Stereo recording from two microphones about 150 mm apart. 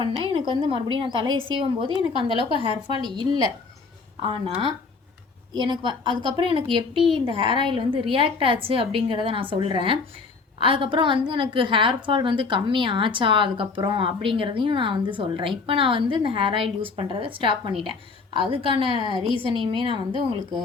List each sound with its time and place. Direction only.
0.0 s a woman's voice: 35° right (ahead or behind)